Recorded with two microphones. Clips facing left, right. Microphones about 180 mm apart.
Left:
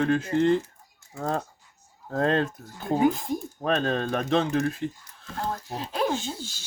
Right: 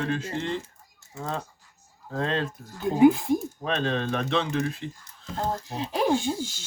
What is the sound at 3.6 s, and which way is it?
Speech, 45° left (ahead or behind).